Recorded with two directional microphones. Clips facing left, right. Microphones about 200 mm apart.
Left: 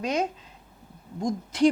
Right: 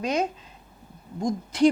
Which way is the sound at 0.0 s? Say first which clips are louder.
Right 1 dB; 10° right (ahead or behind).